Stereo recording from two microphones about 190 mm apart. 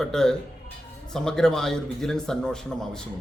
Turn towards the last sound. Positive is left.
turn(degrees=5)  # may be behind; listen again after turning